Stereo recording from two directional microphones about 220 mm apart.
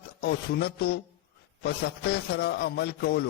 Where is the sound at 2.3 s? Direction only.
50° left (ahead or behind).